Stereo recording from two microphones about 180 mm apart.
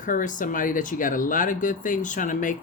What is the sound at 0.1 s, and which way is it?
Speech, 50° left (ahead or behind).